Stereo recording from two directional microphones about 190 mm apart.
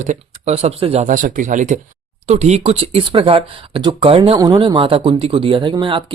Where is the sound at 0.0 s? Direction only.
35° right (ahead or behind).